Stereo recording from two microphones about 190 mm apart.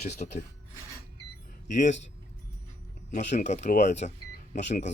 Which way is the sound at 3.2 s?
40° left (ahead or behind).